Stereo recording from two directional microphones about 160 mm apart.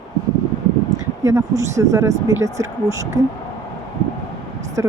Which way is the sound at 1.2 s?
20° right (ahead or behind).